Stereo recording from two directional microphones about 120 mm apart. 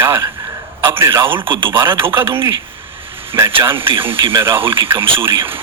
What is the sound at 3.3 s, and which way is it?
Speech, 40° right (ahead or behind).